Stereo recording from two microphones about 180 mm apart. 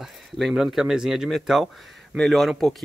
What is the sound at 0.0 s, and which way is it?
Speech, centre (ahead or behind).